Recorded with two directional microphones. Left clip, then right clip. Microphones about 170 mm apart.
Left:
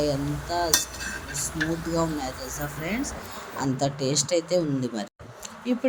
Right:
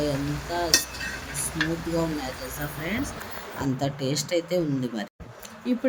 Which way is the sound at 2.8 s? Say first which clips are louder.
Right 1 dB; 15° left (ahead or behind).